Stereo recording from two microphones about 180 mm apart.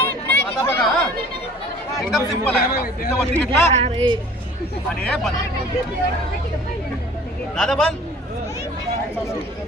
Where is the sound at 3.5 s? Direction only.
35° right (ahead or behind).